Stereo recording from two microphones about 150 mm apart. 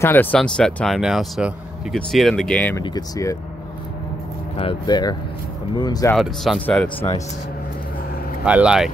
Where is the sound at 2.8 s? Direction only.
25° left (ahead or behind).